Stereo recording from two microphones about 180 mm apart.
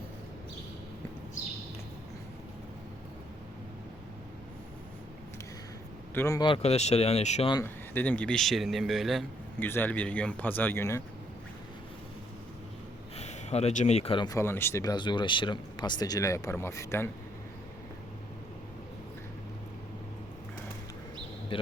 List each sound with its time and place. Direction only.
6.1 s speech: 15° left (ahead or behind); by 7.5 s 40° left (ahead or behind)
7.5 s speech: 10° left (ahead or behind)
9.6 s speech: 10° left (ahead or behind)
13.1 s speech: 35° left (ahead or behind)
14.3 s speech: 15° left (ahead or behind)
21.5 s a man's voice: 30° left (ahead or behind)